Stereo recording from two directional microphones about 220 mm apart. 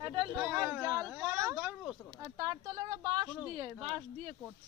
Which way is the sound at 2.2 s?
15° right (ahead or behind).